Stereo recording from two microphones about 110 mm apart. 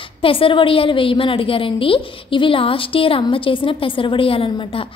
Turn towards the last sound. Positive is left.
turn(degrees=55)  # may be behind; listen again after turning